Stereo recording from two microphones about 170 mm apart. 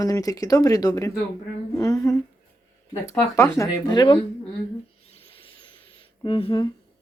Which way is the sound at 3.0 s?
15° left (ahead or behind).